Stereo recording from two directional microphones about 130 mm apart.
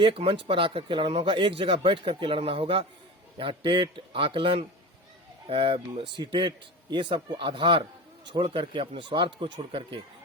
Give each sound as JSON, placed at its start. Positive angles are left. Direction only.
{"t": 0.0, "sound": "a man's voice", "side_deg": -45}